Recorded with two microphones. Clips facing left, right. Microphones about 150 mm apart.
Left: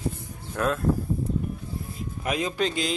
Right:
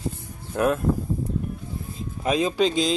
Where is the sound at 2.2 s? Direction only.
20° right (ahead or behind).